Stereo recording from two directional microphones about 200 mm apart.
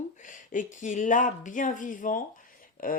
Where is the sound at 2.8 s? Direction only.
45° left (ahead or behind).